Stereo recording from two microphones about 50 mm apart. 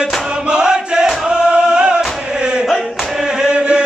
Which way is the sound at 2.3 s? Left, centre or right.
Centre.